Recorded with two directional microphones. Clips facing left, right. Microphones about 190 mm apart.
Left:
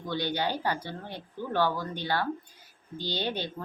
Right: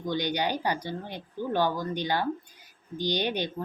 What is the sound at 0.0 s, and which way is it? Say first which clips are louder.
Speech: right 2 dB; 15° right (ahead or behind).